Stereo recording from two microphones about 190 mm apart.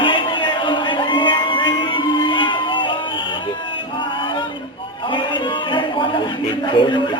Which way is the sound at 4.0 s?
25° left (ahead or behind).